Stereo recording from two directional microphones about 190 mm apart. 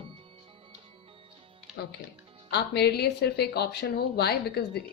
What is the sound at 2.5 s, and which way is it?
Speech, 60° left (ahead or behind).